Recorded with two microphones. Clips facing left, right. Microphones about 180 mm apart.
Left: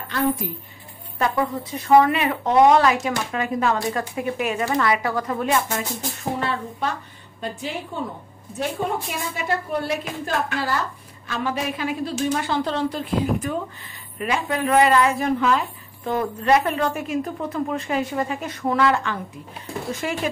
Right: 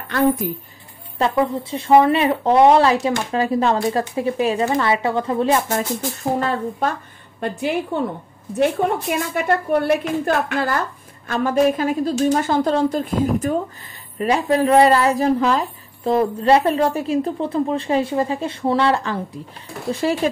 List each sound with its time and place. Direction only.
0.4 s a woman's voice: 50° right (ahead or behind)
1.1 s speech: 30° right (ahead or behind)
6.4 s a woman's voice: 45° right (ahead or behind)